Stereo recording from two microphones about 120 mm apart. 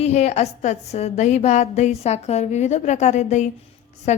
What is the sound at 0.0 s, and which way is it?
A woman's voice, 70° left (ahead or behind).